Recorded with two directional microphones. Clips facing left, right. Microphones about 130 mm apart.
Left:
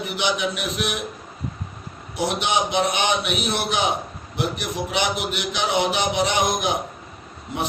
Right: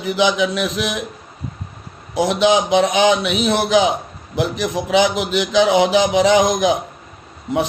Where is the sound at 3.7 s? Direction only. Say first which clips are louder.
Right 8 dB; 90° right.